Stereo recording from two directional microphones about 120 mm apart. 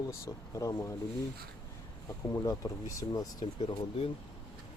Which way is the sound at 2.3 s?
30° left (ahead or behind).